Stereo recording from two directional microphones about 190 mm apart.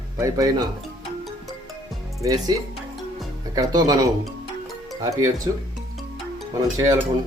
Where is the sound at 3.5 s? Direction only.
20° right (ahead or behind).